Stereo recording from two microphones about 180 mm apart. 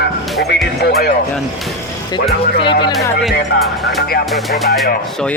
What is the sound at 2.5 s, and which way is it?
Speech, 25° left (ahead or behind).